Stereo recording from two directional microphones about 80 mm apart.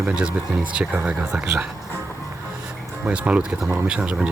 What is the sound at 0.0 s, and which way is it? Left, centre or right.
Speech, centre.